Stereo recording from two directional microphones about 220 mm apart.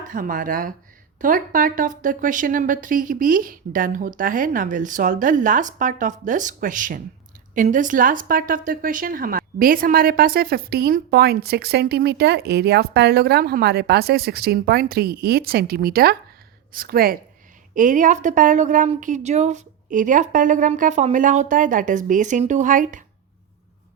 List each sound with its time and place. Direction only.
0.1 s a woman's voice: 40° right (ahead or behind)